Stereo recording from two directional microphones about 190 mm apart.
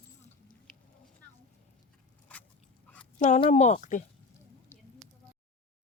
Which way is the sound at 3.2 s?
40° left (ahead or behind).